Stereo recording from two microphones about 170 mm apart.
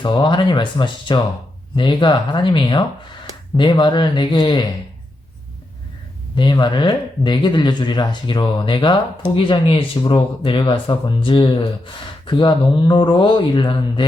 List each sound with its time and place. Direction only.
0.0 s speech: 30° left (ahead or behind)
6.3 s speech: 25° left (ahead or behind)